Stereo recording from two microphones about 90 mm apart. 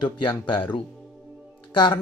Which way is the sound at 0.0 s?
65° left (ahead or behind).